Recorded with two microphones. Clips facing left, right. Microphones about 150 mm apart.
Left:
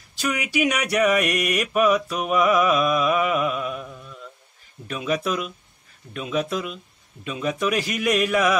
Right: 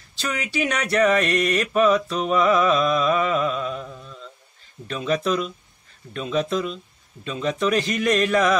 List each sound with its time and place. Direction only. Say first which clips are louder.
0.2 s mantra: left 2 dB; 10° left (ahead or behind)
4.0 s a sound: even; 10° left (ahead or behind)
4.8 s mantra: right 2 dB; 10° left (ahead or behind)